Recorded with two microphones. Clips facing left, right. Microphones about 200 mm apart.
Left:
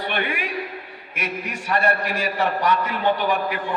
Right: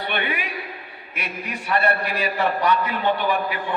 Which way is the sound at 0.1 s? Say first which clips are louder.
Even; 45° left (ahead or behind).